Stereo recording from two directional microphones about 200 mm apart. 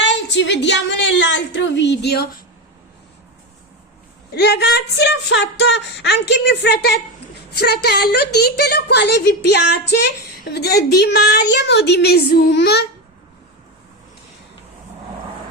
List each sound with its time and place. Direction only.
0.0 s a sound: 65° left (ahead or behind)
1.2 s speech: 65° left (ahead or behind)
4.4 s a woman's voice: 55° left (ahead or behind)